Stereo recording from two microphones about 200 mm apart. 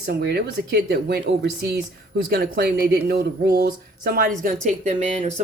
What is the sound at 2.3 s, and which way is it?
Speech, 50° right (ahead or behind).